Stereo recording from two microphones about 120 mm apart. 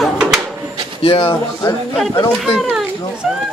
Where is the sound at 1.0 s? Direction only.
45° left (ahead or behind).